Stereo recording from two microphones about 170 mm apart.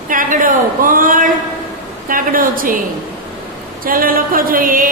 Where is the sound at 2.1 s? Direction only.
55° right (ahead or behind).